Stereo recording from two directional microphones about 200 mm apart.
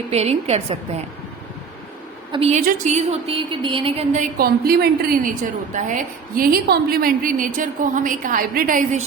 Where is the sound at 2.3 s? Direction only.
30° right (ahead or behind).